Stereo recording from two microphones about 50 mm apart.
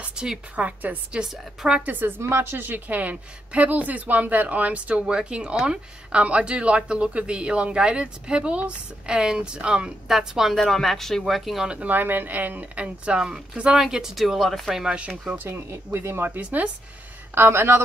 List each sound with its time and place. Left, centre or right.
0.0 s a sound: centre
0.6 s speech: right
1.2 s speech: centre
1.8 s speech: right
10.0 s speech: centre
10.5 s speech: centre
11.6 s speech: right
11.9 s speech: right; by 14.7 s centre
14.7 s speech: centre
15.0 s speech: right
15.5 s speech: right
16.3 s speech: right
17.3 s speech: right